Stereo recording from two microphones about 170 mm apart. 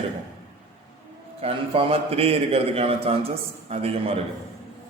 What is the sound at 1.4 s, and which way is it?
A man's voice, 35° right (ahead or behind).